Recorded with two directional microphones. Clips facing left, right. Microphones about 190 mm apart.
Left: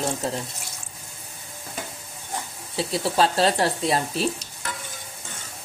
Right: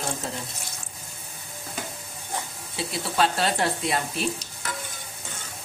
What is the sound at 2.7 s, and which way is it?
Speech, 35° left (ahead or behind).